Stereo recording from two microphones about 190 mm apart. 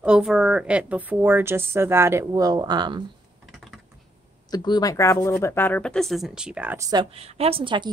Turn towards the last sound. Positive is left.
turn(degrees=-25)  # may be behind; listen again after turning